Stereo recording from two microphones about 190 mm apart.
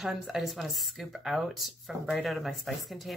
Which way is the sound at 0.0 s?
Centre (ahead or behind).